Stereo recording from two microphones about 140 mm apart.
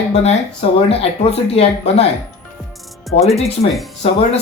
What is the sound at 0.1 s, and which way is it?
Speech, 50° left (ahead or behind).